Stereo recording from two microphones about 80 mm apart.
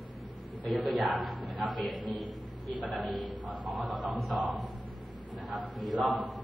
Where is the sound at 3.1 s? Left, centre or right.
Right.